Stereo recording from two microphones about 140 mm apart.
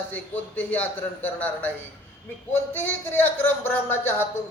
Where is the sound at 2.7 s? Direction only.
15° left (ahead or behind).